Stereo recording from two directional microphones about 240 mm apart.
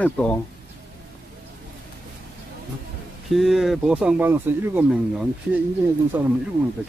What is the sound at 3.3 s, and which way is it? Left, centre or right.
Speech, centre.